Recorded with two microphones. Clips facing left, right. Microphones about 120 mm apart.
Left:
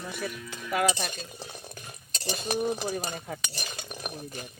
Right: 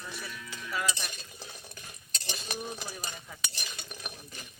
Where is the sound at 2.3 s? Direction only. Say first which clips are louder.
Left 10 dB; 55° left (ahead or behind).